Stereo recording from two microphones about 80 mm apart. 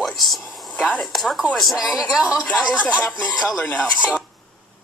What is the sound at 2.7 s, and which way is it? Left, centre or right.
Speech, centre.